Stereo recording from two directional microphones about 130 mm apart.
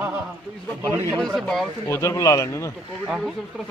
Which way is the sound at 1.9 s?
25° left (ahead or behind).